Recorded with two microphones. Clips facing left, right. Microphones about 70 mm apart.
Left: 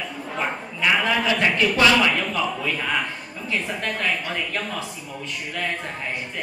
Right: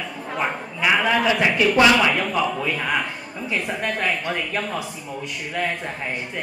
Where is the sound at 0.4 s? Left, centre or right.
Centre.